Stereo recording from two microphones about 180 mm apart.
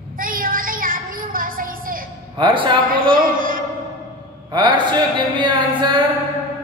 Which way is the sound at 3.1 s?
50° right (ahead or behind).